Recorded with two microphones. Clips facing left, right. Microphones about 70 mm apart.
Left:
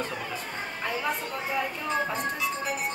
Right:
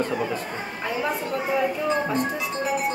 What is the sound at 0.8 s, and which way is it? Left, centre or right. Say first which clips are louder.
Speech: right 4 dB; centre.